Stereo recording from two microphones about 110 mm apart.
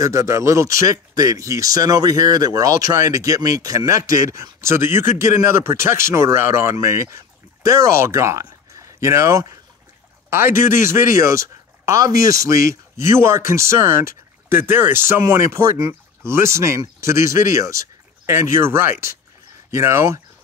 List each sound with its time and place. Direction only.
0.0 s speech: 30° right (ahead or behind)